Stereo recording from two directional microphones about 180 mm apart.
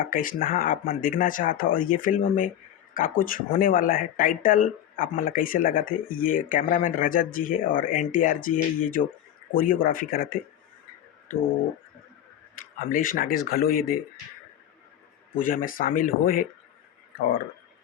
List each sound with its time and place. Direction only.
0.0 s speech: 50° left (ahead or behind)
12.5 s speech: 50° left (ahead or behind)
15.4 s speech: 50° left (ahead or behind)